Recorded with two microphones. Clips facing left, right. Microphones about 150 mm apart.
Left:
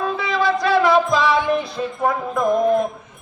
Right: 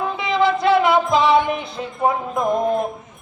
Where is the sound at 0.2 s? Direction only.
20° right (ahead or behind).